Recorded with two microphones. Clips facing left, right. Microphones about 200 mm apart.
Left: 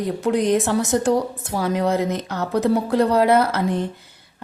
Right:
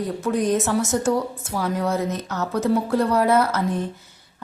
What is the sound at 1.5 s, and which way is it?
A woman's voice, 25° left (ahead or behind).